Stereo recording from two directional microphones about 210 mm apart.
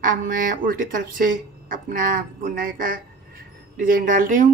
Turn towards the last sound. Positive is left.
turn(degrees=-40)  # may be behind; listen again after turning